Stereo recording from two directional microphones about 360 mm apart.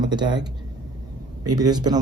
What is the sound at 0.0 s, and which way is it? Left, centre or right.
Speech, centre.